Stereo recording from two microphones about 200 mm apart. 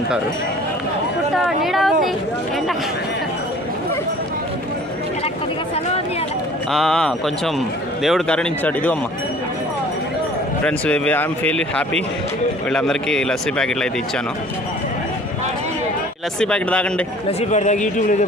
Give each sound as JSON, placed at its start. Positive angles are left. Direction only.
{"t": 1.5, "sound": "speech", "side_deg": 0}
{"t": 6.7, "sound": "speech", "side_deg": 0}
{"t": 10.6, "sound": "speech", "side_deg": 5}
{"t": 16.4, "sound": "speech", "side_deg": 5}
{"t": 17.2, "sound": "speech", "side_deg": 35}